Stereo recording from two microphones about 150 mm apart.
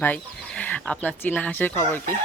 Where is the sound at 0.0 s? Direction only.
10° left (ahead or behind).